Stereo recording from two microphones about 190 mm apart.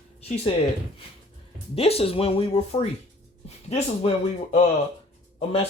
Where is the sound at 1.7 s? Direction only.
30° left (ahead or behind).